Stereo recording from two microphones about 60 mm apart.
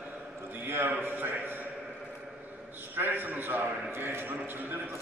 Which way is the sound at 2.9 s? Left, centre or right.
Right.